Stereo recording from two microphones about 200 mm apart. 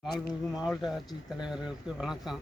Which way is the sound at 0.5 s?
Centre (ahead or behind).